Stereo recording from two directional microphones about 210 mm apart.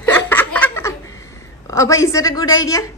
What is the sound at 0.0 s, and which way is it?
Chuckle, 10° left (ahead or behind).